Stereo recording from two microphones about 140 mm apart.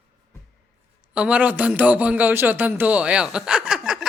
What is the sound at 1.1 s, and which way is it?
A man's voice, 10° right (ahead or behind).